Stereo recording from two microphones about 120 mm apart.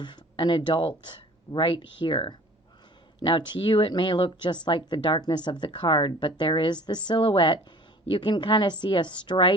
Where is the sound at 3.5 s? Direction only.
45° left (ahead or behind).